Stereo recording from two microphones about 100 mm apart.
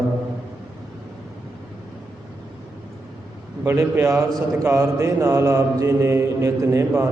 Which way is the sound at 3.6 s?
25° right (ahead or behind).